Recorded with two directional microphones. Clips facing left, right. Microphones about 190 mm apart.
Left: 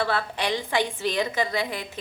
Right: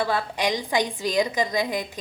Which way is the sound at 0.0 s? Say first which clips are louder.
Right 2 dB; 15° right (ahead or behind).